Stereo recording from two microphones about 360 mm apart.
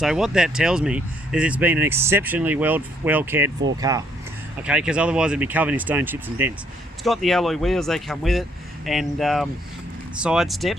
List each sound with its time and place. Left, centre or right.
0.0 s speech: centre